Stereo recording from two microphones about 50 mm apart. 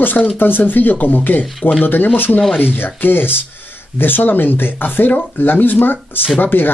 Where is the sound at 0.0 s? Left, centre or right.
Left.